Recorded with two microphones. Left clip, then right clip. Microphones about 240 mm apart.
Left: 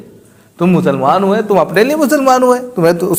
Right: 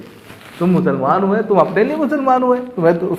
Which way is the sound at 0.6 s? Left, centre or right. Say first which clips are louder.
Left 4 dB; left.